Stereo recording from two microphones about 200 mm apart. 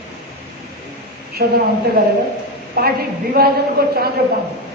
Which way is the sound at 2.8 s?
50° right (ahead or behind).